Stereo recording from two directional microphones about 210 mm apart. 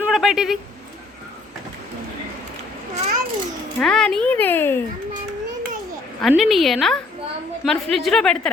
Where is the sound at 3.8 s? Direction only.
5° left (ahead or behind).